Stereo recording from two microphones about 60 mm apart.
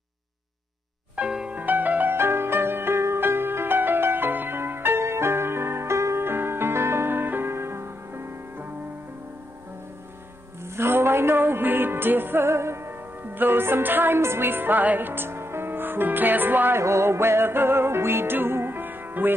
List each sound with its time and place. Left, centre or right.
1.1 s music: centre
1.5 s music: right
2.1 s music: right
10.6 s music: right
16.8 s music: right